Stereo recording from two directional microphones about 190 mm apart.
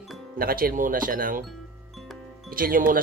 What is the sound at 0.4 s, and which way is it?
Speech, 50° right (ahead or behind).